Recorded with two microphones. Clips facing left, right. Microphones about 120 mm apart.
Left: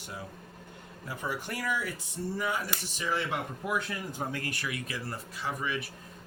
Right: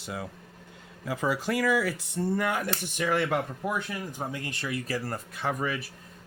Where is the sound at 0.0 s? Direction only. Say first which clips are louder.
Right 5 dB; 90° right; by 3.2 s 55° right (ahead or behind).